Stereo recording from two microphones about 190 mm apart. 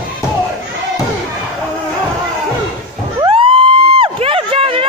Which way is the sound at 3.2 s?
30° right (ahead or behind).